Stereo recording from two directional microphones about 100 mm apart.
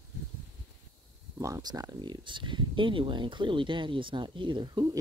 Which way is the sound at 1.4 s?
40° right (ahead or behind).